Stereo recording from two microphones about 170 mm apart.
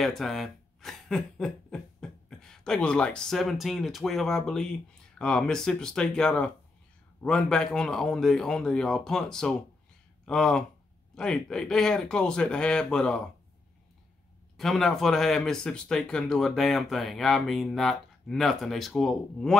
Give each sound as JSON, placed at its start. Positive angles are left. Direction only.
{"t": 0.0, "sound": "speech", "side_deg": 0}
{"t": 14.6, "sound": "speech", "side_deg": 0}